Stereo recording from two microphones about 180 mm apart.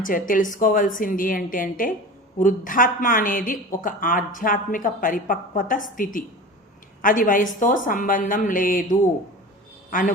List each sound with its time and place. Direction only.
0.0 s speech: 50° left (ahead or behind)